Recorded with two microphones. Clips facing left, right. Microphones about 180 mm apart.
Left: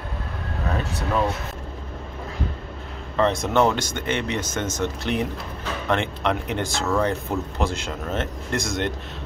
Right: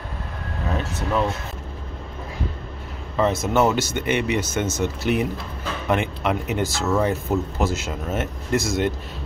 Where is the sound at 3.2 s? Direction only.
5° right (ahead or behind).